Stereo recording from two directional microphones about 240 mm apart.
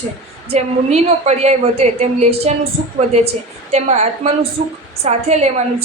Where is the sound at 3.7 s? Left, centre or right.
Right.